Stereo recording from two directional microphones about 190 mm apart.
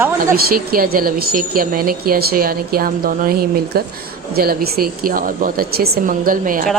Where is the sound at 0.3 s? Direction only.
50° right (ahead or behind).